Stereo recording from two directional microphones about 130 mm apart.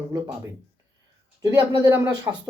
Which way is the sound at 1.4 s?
25° right (ahead or behind).